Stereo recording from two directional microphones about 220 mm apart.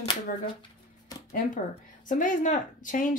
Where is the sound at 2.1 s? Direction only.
35° left (ahead or behind).